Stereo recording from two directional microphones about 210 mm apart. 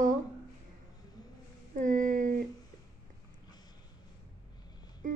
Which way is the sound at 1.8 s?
40° right (ahead or behind).